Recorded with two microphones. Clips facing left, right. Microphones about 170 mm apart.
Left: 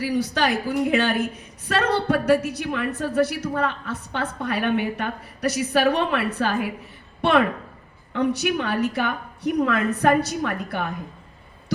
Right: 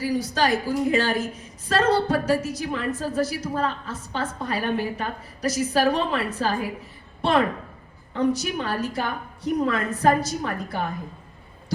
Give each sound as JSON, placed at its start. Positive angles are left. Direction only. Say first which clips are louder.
{"t": 0.0, "sound": "a woman's voice", "louder": "left 1 dB", "side_deg": 65}